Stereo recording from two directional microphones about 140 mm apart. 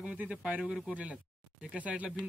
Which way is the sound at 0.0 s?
10° right (ahead or behind).